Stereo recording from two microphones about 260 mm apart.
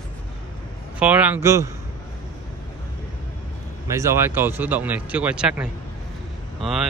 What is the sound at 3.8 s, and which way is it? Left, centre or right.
Speech, centre.